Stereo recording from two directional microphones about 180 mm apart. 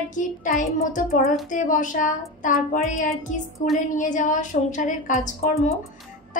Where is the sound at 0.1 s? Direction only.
45° left (ahead or behind).